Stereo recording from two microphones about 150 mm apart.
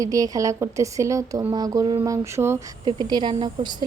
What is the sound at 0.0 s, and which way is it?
Speech, 20° right (ahead or behind).